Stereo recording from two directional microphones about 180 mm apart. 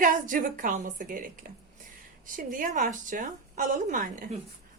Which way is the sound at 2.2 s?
50° right (ahead or behind).